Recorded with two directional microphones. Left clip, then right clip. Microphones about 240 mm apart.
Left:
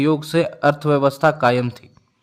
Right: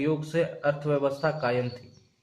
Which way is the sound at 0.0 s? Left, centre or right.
Left.